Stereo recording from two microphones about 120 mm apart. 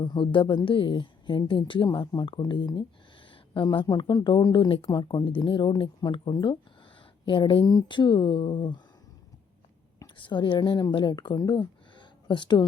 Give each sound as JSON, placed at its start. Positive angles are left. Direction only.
{"t": 0.0, "sound": "a woman's voice", "side_deg": 45}
{"t": 10.2, "sound": "speech", "side_deg": 45}